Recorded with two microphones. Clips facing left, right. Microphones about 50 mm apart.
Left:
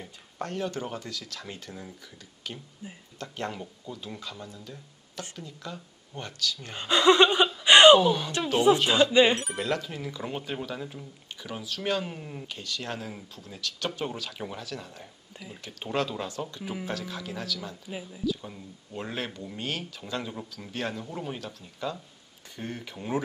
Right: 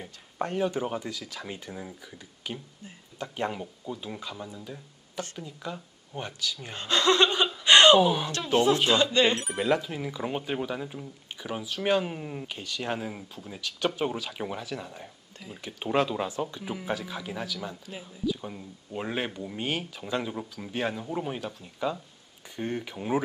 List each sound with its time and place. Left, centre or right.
0.0 s speech: centre
2.8 s speech: centre
3.2 s speech: centre
6.7 s speech: centre
7.6 s a sound: centre
7.9 s speech: centre
9.3 s speech: centre